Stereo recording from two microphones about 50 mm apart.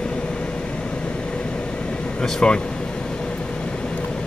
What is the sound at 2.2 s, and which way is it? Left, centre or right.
Speech, centre.